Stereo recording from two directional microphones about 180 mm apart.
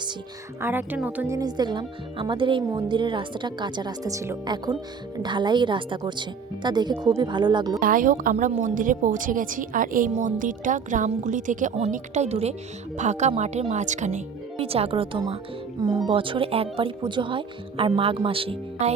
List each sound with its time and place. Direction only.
0.6 s speech: 10° right (ahead or behind)
1.4 s speech: 25° right (ahead or behind)
7.8 s a woman's voice: 50° right (ahead or behind); by 18.9 s 35° right (ahead or behind)